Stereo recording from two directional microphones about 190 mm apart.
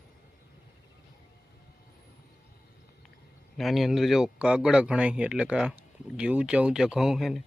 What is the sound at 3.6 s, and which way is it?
Speech, centre (ahead or behind).